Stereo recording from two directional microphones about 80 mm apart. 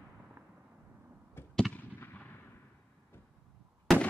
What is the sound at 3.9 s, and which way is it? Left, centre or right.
Fireworks, centre.